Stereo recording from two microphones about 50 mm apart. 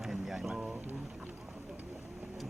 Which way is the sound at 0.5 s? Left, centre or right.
Centre.